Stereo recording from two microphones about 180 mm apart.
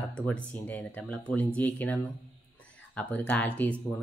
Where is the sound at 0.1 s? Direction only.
5° left (ahead or behind).